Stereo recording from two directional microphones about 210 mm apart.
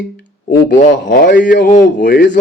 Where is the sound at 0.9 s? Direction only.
40° left (ahead or behind).